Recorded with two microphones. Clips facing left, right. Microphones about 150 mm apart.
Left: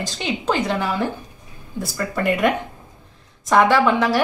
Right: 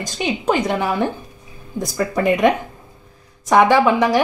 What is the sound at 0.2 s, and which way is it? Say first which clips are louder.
Speech: right 3 dB; 15° right (ahead or behind).